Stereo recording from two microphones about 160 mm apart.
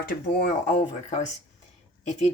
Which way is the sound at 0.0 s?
65° left (ahead or behind).